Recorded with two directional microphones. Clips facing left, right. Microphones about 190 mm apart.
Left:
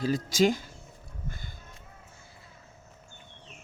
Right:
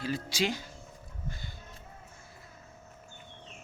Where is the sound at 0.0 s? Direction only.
45° left (ahead or behind).